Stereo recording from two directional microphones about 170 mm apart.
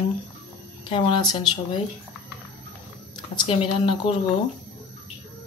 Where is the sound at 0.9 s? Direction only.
30° left (ahead or behind).